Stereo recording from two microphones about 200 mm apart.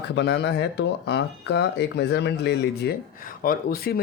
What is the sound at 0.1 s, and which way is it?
Speech, 60° left (ahead or behind).